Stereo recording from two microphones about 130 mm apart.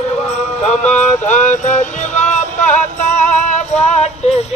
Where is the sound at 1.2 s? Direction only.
65° left (ahead or behind).